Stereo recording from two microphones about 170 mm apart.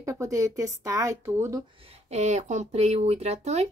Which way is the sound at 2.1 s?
40° right (ahead or behind).